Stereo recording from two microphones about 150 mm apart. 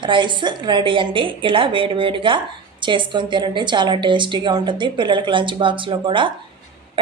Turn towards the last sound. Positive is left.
turn(degrees=-30)  # may be behind; listen again after turning